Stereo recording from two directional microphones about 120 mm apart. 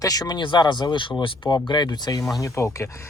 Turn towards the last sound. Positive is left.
turn(degrees=25)  # may be behind; listen again after turning